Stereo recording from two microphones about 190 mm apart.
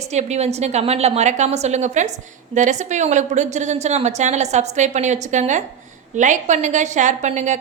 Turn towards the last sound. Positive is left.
turn(degrees=-40)  # may be behind; listen again after turning